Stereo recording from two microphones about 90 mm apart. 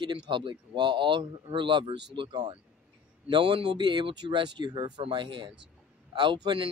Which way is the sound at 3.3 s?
70° right (ahead or behind).